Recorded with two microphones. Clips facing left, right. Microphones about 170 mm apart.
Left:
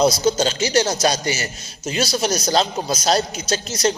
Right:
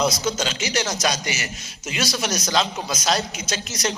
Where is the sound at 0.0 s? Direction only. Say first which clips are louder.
Left 6 dB; 30° left (ahead or behind).